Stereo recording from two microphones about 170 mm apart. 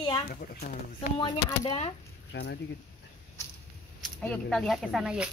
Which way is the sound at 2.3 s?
75° left (ahead or behind).